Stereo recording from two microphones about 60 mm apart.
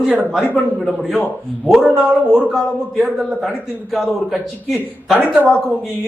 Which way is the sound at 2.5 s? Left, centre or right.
Centre.